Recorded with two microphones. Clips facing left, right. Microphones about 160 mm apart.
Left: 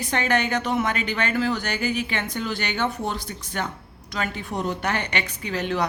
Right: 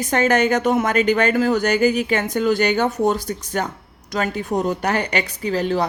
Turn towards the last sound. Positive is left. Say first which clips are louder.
# right 6 dB
turn(degrees=-35)  # may be behind; listen again after turning